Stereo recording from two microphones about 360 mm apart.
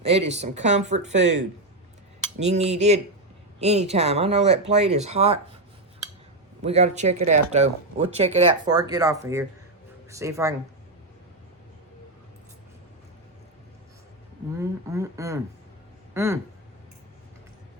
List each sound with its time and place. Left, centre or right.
0.0 s speech: centre
6.6 s speech: centre
14.6 s speech: centre